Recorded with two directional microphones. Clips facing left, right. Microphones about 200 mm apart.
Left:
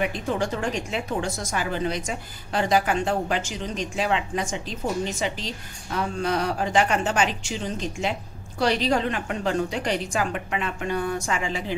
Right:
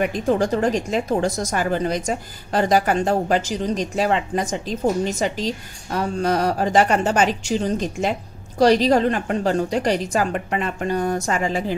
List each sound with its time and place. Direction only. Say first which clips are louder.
0.0 s a woman's voice: right 6 dB; 45° right (ahead or behind)